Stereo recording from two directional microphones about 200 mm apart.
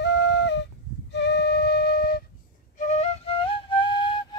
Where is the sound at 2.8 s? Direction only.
35° left (ahead or behind).